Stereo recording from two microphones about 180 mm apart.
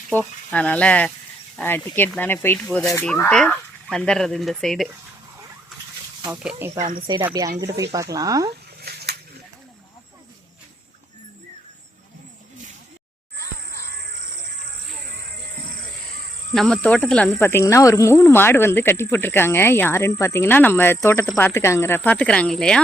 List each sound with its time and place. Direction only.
0.1 s speech: 5° left (ahead or behind)
2.6 s speech: centre (ahead or behind)
6.2 s speech: 5° right (ahead or behind)
8.8 s a sound: 65° right (ahead or behind)
13.7 s music: 55° right (ahead or behind)
16.6 s speech: 5° left (ahead or behind)
17.4 s speech: 15° left (ahead or behind)